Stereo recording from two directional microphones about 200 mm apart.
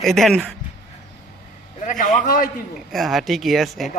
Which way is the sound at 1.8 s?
40° left (ahead or behind).